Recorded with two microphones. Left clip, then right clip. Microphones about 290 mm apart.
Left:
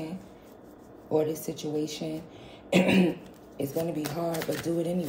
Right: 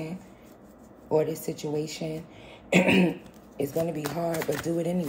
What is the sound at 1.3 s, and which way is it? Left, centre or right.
Speech, right.